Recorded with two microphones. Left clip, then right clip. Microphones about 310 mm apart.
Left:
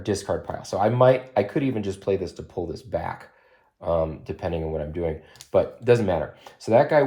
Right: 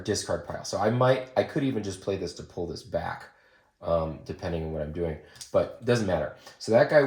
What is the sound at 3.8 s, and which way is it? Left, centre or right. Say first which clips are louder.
Speech: left 3 dB; left.